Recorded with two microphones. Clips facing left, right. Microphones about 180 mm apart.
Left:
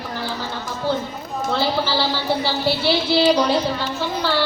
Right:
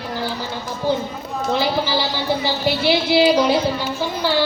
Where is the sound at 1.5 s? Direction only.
15° right (ahead or behind).